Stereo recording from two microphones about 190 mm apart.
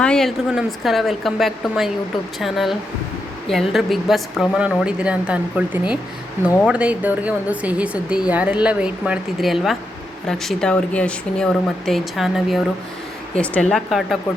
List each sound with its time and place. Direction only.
0.0 s a woman's voice: 5° left (ahead or behind)